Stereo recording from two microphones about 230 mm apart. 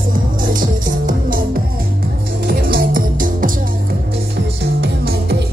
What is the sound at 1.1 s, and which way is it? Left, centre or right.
Music, right.